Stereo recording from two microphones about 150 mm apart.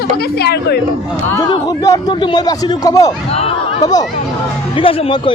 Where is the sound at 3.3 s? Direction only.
40° left (ahead or behind).